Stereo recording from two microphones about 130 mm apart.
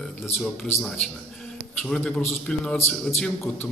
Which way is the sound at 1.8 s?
5° left (ahead or behind).